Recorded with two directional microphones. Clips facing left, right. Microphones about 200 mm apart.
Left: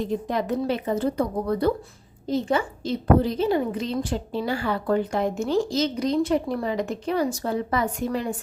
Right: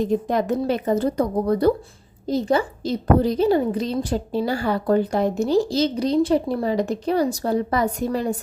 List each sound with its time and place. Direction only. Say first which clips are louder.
0.0 s speech: right 5 dB; 45° right (ahead or behind)